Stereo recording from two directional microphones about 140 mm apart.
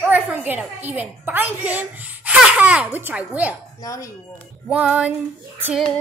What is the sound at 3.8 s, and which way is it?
Speech, 25° left (ahead or behind).